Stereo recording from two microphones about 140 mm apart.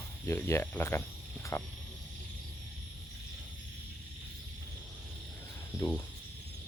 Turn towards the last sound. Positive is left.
turn(degrees=10)  # may be behind; listen again after turning